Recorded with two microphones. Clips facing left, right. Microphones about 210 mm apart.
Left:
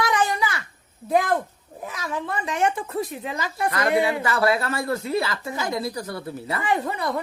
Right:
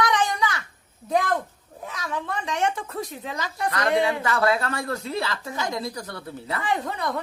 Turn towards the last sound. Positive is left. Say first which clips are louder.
# left 2 dB
turn(degrees=5)  # may be behind; listen again after turning